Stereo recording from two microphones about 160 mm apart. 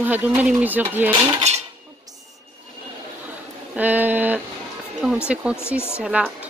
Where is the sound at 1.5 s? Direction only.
45° right (ahead or behind).